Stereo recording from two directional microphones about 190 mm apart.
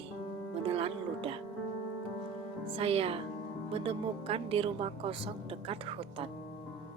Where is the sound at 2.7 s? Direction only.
30° right (ahead or behind).